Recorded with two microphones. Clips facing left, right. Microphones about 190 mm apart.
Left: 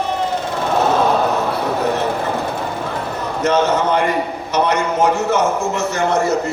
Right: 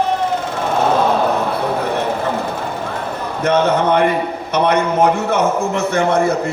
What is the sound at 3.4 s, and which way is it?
A man's voice, 55° right (ahead or behind).